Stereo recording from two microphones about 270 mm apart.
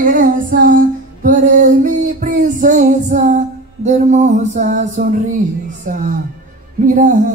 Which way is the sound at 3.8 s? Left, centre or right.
Right.